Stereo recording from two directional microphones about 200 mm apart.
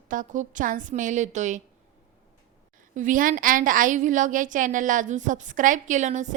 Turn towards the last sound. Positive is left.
turn(degrees=-35)  # may be behind; listen again after turning